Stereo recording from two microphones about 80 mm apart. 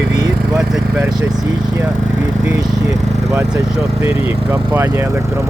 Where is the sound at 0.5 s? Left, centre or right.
Centre.